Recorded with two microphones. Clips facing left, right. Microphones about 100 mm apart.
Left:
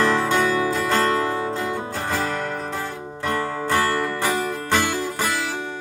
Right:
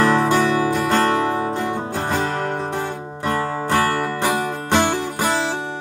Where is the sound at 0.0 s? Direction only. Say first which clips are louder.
Right 3 dB; 30° right (ahead or behind).